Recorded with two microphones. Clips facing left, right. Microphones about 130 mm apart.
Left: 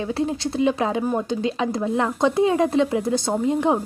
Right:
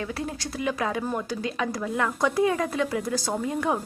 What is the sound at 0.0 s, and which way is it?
Speech, 25° left (ahead or behind).